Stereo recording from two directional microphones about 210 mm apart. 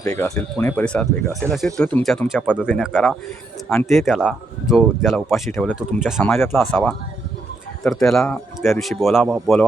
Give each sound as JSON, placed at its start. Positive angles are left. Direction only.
{"t": 0.0, "sound": "speech", "side_deg": 15}
{"t": 0.3, "sound": "speech", "side_deg": 5}